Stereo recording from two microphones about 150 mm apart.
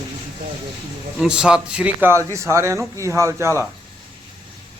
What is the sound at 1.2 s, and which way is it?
A man's voice, 5° right (ahead or behind).